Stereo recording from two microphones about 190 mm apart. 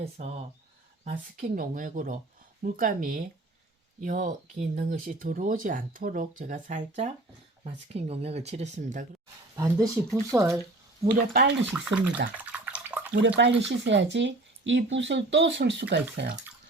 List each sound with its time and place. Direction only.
0.0 s speech: 35° right (ahead or behind)
1.0 s speech: 45° right (ahead or behind)
9.6 s speech: 15° right (ahead or behind)
11.7 s speech: 5° right (ahead or behind)
12.4 s bathtub: 5° right (ahead or behind)
13.1 s speech: 70° right (ahead or behind)